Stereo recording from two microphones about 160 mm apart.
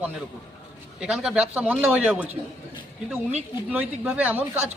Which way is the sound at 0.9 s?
5° right (ahead or behind).